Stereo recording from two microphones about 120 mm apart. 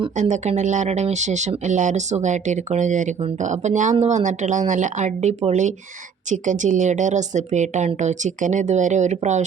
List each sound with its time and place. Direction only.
0.2 s speech: 75° right (ahead or behind)
6.3 s speech: 90° right